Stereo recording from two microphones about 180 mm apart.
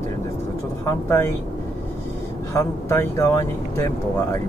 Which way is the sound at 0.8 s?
15° left (ahead or behind).